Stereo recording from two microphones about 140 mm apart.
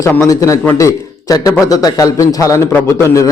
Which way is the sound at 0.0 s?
20° left (ahead or behind).